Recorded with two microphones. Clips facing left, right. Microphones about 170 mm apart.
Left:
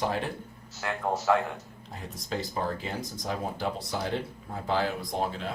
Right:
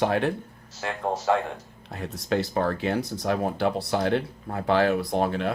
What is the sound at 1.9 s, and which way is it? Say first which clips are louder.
Speech: right 8 dB; 70° right (ahead or behind).